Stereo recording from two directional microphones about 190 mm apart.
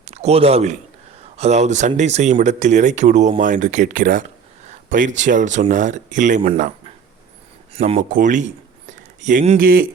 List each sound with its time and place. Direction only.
0.0 s a man's voice: 35° right (ahead or behind)
7.9 s speech: 40° right (ahead or behind)